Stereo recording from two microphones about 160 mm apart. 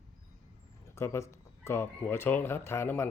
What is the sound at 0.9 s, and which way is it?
Speech, 15° left (ahead or behind).